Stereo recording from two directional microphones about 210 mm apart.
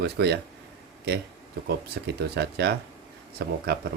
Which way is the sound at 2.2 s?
50° right (ahead or behind).